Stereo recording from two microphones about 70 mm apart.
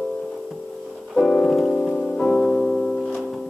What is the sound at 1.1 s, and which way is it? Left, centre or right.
Piano, centre.